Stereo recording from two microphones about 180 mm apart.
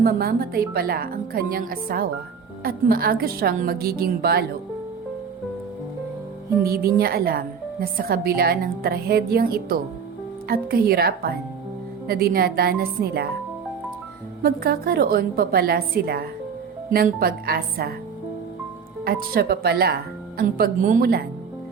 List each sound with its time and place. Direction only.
0.0 s a woman's voice: 60° right (ahead or behind)
6.6 s a woman's voice: 55° right (ahead or behind)
14.4 s a woman's voice: 55° right (ahead or behind)
19.0 s a woman's voice: 55° right (ahead or behind)